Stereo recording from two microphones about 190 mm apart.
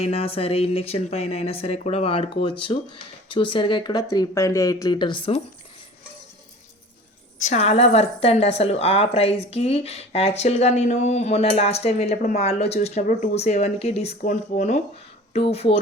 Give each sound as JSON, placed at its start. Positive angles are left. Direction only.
{"t": 0.0, "sound": "a woman's voice", "side_deg": 30}
{"t": 7.4, "sound": "a woman's voice", "side_deg": 35}